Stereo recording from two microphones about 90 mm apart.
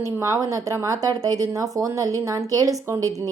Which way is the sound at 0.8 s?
45° right (ahead or behind).